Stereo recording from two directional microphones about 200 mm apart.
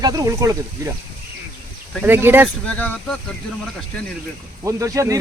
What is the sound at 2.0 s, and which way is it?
Speech, 10° right (ahead or behind).